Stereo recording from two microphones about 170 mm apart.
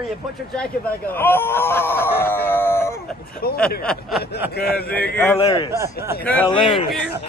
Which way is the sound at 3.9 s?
Centre (ahead or behind).